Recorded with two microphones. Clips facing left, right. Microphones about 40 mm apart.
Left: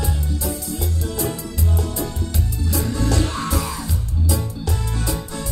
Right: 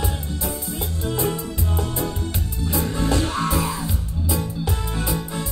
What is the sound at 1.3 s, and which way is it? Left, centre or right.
Salsa music, right.